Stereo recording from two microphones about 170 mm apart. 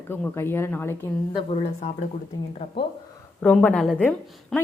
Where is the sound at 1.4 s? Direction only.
35° left (ahead or behind).